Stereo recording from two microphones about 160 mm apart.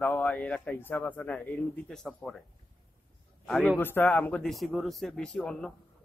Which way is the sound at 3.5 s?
Centre (ahead or behind).